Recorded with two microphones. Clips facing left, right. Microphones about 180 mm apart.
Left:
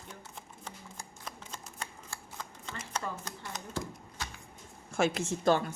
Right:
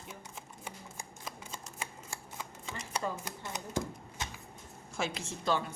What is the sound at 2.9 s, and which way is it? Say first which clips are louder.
Speech: right 2 dB; 15° right (ahead or behind).